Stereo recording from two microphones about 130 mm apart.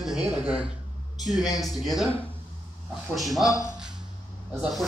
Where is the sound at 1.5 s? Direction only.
30° left (ahead or behind).